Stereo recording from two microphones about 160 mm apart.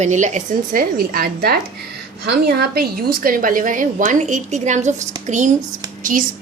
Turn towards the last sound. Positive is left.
turn(degrees=-55)  # may be behind; listen again after turning